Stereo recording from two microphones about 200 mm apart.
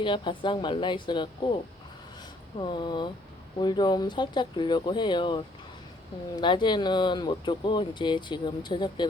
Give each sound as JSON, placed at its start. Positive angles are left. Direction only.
{"t": 0.0, "sound": "speech", "side_deg": 25}
{"t": 2.6, "sound": "speech", "side_deg": 25}